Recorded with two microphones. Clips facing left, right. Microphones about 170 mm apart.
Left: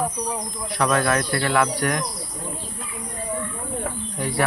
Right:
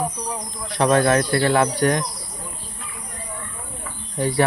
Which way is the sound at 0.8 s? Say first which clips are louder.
Right 4 dB; 30° right (ahead or behind).